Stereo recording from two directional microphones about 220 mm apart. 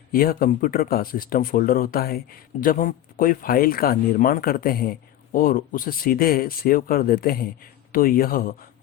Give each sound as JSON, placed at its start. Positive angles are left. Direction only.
{"t": 0.1, "sound": "speech", "side_deg": 40}